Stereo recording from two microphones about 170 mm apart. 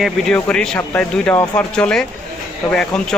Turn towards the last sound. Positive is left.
turn(degrees=5)  # may be behind; listen again after turning